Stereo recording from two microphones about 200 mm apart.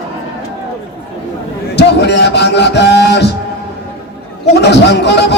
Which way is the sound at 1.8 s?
60° left (ahead or behind).